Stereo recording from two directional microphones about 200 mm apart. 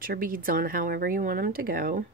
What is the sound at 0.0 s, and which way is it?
Speech, 45° right (ahead or behind).